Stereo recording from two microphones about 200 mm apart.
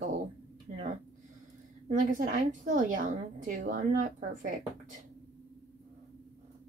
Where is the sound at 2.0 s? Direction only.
40° right (ahead or behind).